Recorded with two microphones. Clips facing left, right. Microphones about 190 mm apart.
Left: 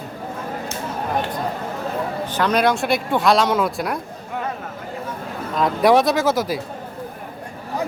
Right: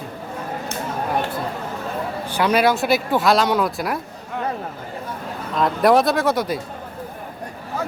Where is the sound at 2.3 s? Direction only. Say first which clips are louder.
Right 1 dB; 10° right (ahead or behind).